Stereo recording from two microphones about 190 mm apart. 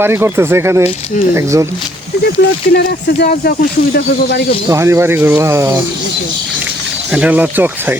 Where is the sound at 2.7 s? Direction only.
55° left (ahead or behind).